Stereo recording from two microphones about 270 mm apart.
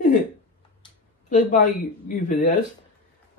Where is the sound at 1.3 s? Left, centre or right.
Left.